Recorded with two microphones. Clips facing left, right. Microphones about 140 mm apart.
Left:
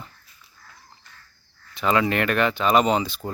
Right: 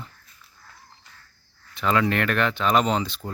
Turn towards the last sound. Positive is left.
turn(degrees=5)  # may be behind; listen again after turning